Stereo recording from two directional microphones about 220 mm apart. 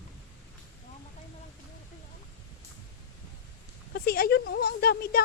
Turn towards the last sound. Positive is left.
turn(degrees=45)  # may be behind; listen again after turning